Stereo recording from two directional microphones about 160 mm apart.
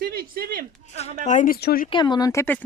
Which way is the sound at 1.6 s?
75° left (ahead or behind).